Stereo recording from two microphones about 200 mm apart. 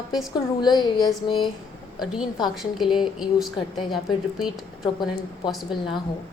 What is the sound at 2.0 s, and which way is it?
A woman's voice, centre (ahead or behind).